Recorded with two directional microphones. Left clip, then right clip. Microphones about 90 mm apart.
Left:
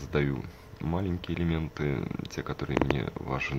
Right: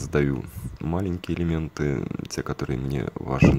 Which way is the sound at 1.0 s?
50° right (ahead or behind).